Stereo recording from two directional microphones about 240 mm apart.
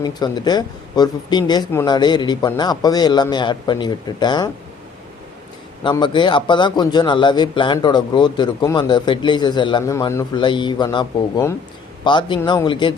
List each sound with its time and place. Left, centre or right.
0.0 s speech: centre
5.8 s a man's voice: centre